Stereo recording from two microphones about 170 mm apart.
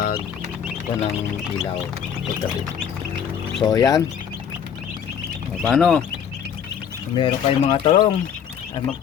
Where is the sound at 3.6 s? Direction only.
20° left (ahead or behind).